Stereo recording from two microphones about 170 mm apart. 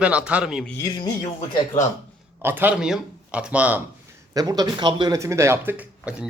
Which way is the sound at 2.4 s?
10° right (ahead or behind).